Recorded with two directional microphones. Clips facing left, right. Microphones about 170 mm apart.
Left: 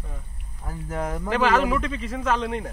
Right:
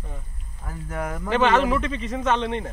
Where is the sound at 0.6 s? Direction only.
15° left (ahead or behind).